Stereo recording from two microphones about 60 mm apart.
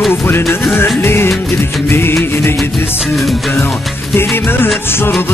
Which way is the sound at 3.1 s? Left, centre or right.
Centre.